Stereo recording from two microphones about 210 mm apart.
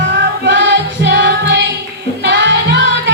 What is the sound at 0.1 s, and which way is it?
Music, 50° right (ahead or behind).